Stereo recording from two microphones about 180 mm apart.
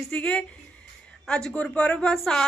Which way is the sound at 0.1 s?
5° left (ahead or behind).